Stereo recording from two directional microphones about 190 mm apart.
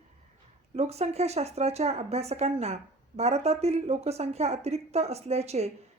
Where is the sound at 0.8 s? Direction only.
35° right (ahead or behind).